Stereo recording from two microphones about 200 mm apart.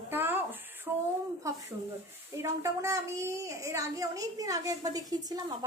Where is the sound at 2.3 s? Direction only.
15° right (ahead or behind).